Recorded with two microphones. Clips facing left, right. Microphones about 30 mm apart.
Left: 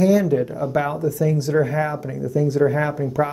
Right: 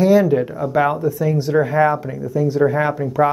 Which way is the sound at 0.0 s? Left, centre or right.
Right.